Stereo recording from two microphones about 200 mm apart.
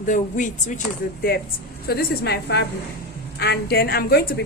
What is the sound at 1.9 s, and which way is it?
A woman's voice, 55° left (ahead or behind).